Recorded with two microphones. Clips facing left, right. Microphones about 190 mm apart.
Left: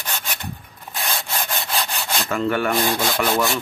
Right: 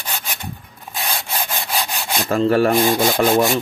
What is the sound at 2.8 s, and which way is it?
Wood, 15° right (ahead or behind).